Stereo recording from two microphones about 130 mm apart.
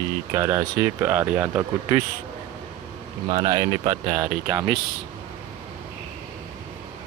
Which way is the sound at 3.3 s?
35° right (ahead or behind).